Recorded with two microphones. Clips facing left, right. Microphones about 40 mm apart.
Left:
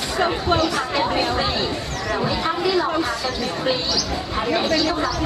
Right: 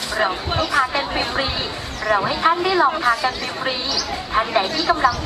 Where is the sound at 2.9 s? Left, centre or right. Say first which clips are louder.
Right 4 dB; centre.